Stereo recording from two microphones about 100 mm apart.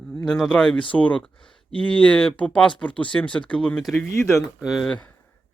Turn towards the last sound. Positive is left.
turn(degrees=0)  # may be behind; listen again after turning